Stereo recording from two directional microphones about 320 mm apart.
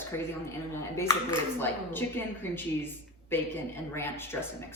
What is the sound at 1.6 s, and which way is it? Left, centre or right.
Speech, centre.